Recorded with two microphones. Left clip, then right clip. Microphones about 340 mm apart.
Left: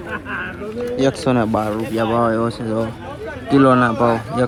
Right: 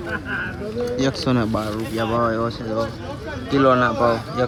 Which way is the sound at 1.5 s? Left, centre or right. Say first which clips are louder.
Left 5 dB; left.